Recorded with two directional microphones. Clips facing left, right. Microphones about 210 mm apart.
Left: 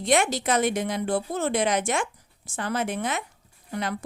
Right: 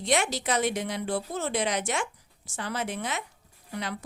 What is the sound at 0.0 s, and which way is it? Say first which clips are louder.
A woman's voice: left 4 dB; 50° left (ahead or behind).